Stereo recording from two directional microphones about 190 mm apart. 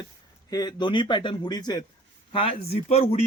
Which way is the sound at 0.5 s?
20° left (ahead or behind).